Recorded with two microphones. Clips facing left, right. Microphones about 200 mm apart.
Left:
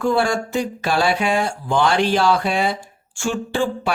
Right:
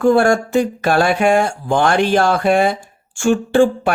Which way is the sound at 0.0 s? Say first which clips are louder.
Right 6 dB; 50° right (ahead or behind).